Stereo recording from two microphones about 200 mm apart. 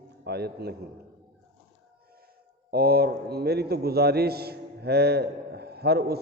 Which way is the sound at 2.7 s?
50° right (ahead or behind).